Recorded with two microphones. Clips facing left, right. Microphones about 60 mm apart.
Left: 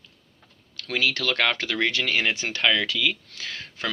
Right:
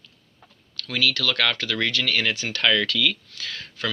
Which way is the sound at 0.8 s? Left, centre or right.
Left.